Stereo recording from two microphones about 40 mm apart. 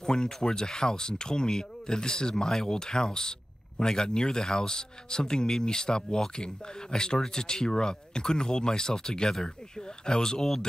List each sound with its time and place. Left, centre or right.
0.0 s speech: centre